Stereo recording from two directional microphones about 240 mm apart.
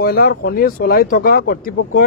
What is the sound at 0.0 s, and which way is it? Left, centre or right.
Speech, left.